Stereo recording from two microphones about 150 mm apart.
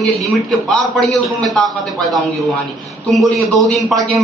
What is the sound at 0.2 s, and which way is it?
A man's voice, centre (ahead or behind).